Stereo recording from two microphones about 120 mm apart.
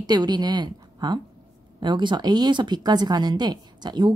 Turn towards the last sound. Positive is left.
turn(degrees=-35)  # may be behind; listen again after turning